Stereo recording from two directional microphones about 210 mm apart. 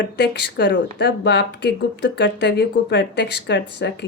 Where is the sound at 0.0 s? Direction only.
55° left (ahead or behind).